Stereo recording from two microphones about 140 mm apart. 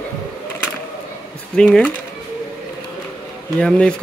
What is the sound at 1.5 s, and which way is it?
Speech, 5° left (ahead or behind).